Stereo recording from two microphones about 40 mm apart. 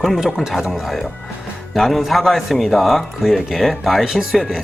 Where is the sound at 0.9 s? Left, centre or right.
Centre.